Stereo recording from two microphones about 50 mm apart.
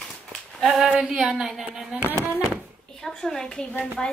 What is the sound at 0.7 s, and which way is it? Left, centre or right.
Speech, centre.